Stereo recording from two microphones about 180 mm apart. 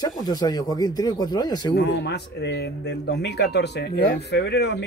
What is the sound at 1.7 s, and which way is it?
Speech, 70° left (ahead or behind).